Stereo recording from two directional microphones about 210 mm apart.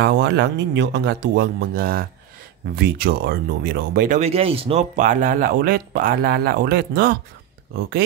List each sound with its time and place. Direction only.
0.0 s speech: 55° right (ahead or behind); by 4.8 s 25° right (ahead or behind)
4.9 s speech: 40° right (ahead or behind)